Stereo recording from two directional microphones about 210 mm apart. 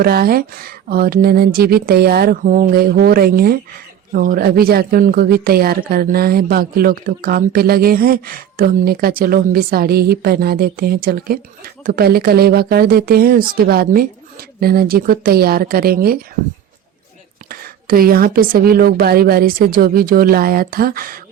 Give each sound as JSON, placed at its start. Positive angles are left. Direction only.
{"t": 0.0, "sound": "speech", "side_deg": -45}
{"t": 17.5, "sound": "speech", "side_deg": -45}